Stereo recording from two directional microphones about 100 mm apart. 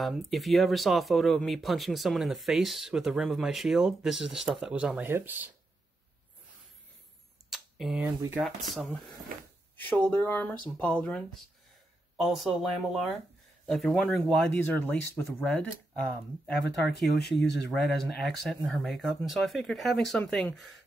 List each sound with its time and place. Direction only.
0.3 s speech: centre (ahead or behind); by 5.5 s 20° right (ahead or behind)
7.4 s a sound: centre (ahead or behind)
8.4 s speech: centre (ahead or behind)
9.8 s speech: 15° left (ahead or behind)
12.2 s speech: 5° right (ahead or behind)
14.6 s speech: 20° left (ahead or behind)
15.4 s speech: 5° left (ahead or behind)
17.0 s speech: 5° left (ahead or behind)